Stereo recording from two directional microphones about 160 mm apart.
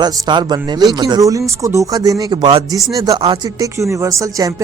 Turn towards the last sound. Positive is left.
turn(degrees=-20)  # may be behind; listen again after turning